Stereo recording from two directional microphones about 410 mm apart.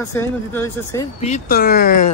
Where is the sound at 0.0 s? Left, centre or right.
Centre.